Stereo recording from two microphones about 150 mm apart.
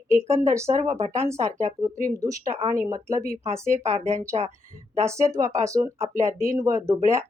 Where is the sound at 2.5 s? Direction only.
60° right (ahead or behind).